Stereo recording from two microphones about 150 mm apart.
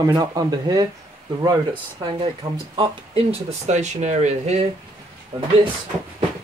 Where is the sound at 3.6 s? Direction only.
50° right (ahead or behind).